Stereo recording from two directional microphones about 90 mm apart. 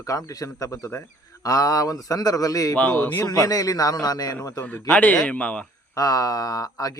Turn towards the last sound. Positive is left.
turn(degrees=40)  # may be behind; listen again after turning